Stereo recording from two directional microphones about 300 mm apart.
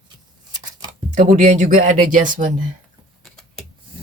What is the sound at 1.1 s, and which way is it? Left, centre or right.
Speech, right.